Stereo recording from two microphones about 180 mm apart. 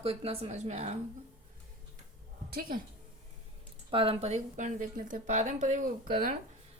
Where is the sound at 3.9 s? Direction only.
30° right (ahead or behind); by 6.3 s 45° right (ahead or behind).